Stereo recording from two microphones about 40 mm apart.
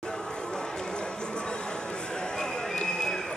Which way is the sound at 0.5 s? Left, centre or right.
Left.